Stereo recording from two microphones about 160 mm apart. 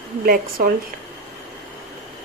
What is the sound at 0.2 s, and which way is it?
Speech, 70° right (ahead or behind).